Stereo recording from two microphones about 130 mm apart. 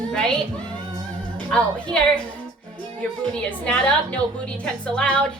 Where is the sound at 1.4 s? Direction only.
5° left (ahead or behind).